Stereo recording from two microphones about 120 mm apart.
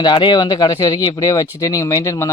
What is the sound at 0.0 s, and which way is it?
Speech, 40° left (ahead or behind).